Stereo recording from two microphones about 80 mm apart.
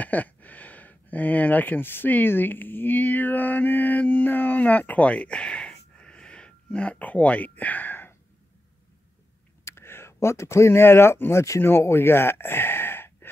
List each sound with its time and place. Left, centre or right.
0.0 s speech: centre
9.7 s speech: left